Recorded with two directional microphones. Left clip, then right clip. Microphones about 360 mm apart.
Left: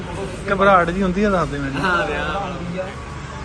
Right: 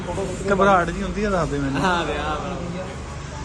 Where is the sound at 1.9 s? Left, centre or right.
Right.